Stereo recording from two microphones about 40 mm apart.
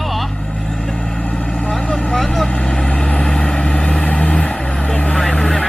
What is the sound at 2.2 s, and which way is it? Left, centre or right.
Speech, centre.